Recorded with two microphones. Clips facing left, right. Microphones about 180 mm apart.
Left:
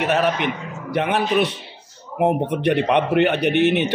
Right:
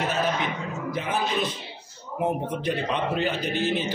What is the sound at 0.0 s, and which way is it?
A man's voice, 70° left (ahead or behind).